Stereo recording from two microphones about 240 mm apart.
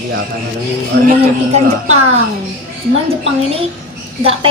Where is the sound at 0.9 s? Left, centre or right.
Right.